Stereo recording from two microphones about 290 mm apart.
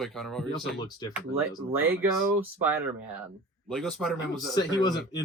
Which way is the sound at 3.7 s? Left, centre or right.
Centre.